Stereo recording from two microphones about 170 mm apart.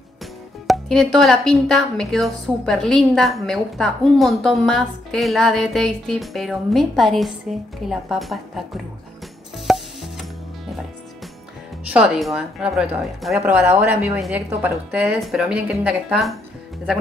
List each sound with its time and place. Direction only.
0.7 s speech: centre (ahead or behind)
9.7 s mechanisms: centre (ahead or behind)
11.9 s speech: 5° right (ahead or behind)